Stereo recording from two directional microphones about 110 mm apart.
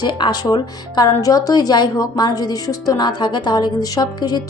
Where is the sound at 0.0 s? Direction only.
40° left (ahead or behind).